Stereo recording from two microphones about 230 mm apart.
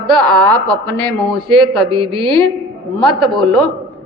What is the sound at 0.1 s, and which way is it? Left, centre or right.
Speech, centre.